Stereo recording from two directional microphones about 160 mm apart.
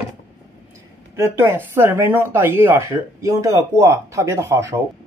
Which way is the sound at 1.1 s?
15° right (ahead or behind).